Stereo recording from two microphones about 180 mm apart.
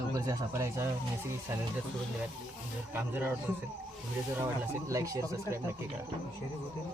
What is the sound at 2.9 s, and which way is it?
Speech, 10° right (ahead or behind).